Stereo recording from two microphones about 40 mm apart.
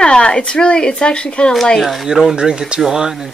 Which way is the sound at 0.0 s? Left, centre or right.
Left.